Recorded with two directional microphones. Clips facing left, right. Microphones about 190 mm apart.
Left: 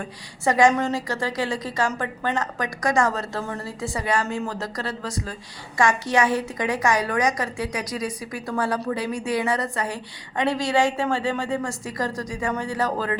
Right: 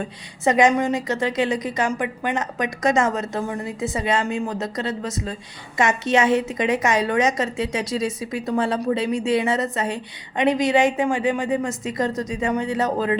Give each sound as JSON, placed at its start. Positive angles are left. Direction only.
{"t": 0.0, "sound": "a woman's voice", "side_deg": -20}